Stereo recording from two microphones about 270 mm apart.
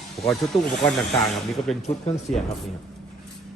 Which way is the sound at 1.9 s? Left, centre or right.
Left.